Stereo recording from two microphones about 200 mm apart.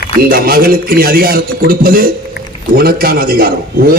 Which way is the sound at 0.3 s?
50° right (ahead or behind).